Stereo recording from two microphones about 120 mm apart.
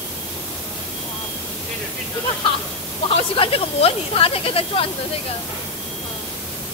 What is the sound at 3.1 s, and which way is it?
Speech, 50° left (ahead or behind).